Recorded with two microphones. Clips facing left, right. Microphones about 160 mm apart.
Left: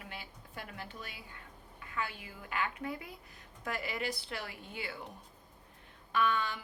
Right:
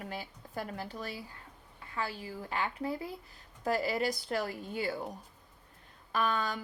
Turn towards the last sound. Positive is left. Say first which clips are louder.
# even
turn(degrees=-40)  # may be behind; listen again after turning